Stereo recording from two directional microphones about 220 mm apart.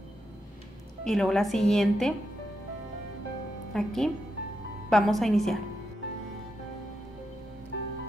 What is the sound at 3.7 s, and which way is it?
A woman's voice, centre (ahead or behind).